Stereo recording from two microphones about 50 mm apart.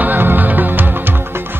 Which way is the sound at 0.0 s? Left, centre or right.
Right.